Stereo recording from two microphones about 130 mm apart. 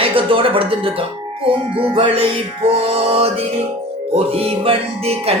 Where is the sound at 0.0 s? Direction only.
45° right (ahead or behind).